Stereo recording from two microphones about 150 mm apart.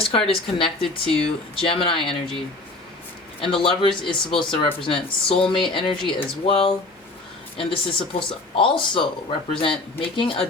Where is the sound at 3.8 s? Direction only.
35° left (ahead or behind).